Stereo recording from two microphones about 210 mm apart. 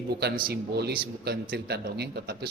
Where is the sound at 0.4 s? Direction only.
50° right (ahead or behind).